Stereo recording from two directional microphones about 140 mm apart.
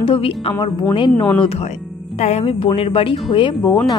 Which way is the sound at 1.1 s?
10° left (ahead or behind).